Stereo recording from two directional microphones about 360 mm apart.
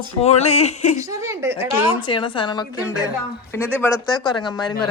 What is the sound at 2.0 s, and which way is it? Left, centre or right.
Speech, centre.